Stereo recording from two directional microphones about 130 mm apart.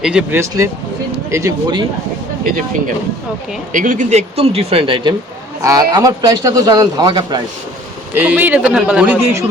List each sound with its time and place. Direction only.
0.0 s speech: 5° right (ahead or behind)
0.3 s speech: 20° right (ahead or behind)
2.4 s speech: 90° right; by 5.1 s 45° right (ahead or behind)
5.6 s a man's voice: 25° right (ahead or behind)
8.1 s speech: 15° right (ahead or behind)